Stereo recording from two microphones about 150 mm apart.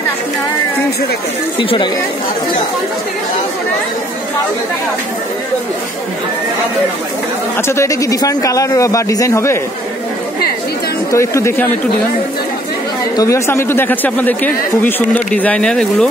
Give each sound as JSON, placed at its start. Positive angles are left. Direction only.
{"t": 1.6, "sound": "speech", "side_deg": 35}
{"t": 7.5, "sound": "a man's voice", "side_deg": 15}
{"t": 11.1, "sound": "a man's voice", "side_deg": 20}
{"t": 13.1, "sound": "speech", "side_deg": 20}